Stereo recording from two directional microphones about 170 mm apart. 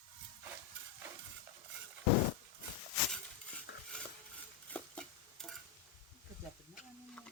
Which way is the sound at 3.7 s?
90° left.